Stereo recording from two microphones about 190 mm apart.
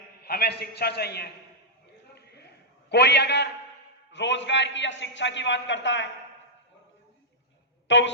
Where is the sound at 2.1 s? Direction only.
60° left (ahead or behind).